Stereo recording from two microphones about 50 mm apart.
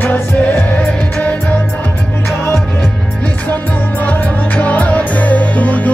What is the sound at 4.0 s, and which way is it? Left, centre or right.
Music, left.